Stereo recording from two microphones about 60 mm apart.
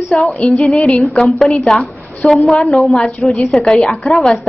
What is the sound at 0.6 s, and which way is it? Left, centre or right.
A woman's voice, centre.